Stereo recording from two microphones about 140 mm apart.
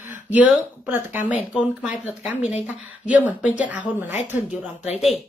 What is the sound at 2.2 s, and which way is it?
Speech, 55° left (ahead or behind).